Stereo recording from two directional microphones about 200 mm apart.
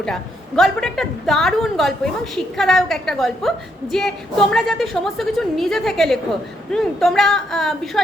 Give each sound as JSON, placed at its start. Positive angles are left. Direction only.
{"t": 0.0, "sound": "a woman's voice", "side_deg": 0}